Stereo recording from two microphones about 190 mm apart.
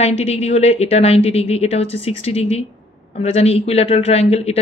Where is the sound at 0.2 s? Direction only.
35° left (ahead or behind).